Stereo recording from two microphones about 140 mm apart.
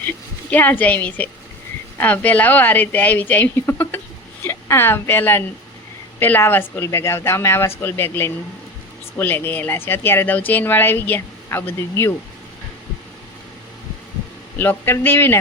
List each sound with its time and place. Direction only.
0.5 s a woman's voice: 15° left (ahead or behind)
14.6 s speech: 15° left (ahead or behind)